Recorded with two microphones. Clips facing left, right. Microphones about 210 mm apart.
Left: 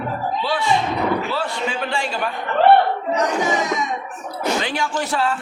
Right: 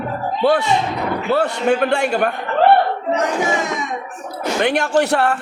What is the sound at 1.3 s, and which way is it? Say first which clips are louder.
Speech: right 8 dB; 65° right (ahead or behind).